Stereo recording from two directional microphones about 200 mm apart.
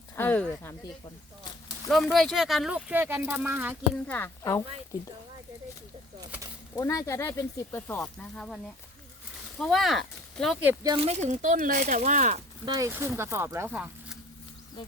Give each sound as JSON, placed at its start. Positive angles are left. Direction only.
{"t": 0.2, "sound": "speech", "side_deg": 10}
{"t": 1.9, "sound": "speech", "side_deg": 0}
{"t": 4.0, "sound": "speech", "side_deg": 10}
{"t": 6.7, "sound": "speech", "side_deg": 15}
{"t": 9.6, "sound": "speech", "side_deg": 0}
{"t": 10.8, "sound": "speech", "side_deg": -30}
{"t": 12.6, "sound": "speech", "side_deg": -15}